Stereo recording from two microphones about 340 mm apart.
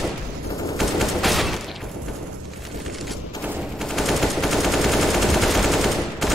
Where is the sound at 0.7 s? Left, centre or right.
Centre.